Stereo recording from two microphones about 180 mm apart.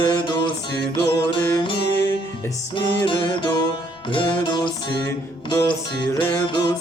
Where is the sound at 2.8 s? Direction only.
25° left (ahead or behind).